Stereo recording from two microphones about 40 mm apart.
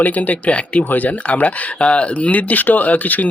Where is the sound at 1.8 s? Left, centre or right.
Left.